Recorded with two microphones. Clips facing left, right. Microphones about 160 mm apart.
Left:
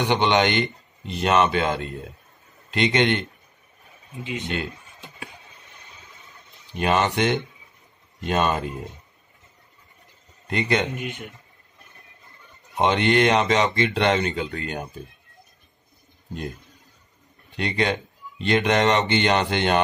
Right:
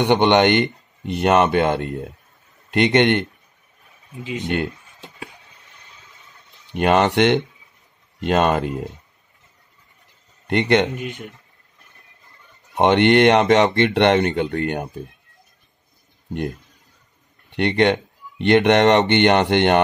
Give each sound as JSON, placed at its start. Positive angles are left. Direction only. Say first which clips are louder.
{"t": 0.1, "sound": "speech", "louder": "right 6 dB", "side_deg": -55}
{"t": 4.2, "sound": "speech", "louder": "right 3 dB", "side_deg": -35}
{"t": 6.7, "sound": "speech", "louder": "right 5 dB", "side_deg": -65}
{"t": 10.4, "sound": "a man's voice", "louder": "right 6 dB", "side_deg": -70}
{"t": 11.0, "sound": "a man's voice", "louder": "right 2 dB", "side_deg": -40}
{"t": 12.8, "sound": "speech", "louder": "right 6 dB", "side_deg": -65}
{"t": 17.5, "sound": "speech", "louder": "right 7 dB", "side_deg": -70}